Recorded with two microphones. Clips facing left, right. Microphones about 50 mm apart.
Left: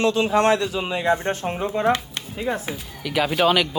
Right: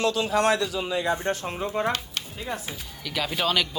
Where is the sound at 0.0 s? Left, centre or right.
Left.